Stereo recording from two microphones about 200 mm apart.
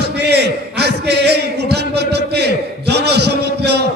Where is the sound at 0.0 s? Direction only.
55° right (ahead or behind).